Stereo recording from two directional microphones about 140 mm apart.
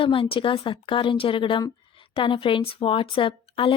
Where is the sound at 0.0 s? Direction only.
40° left (ahead or behind).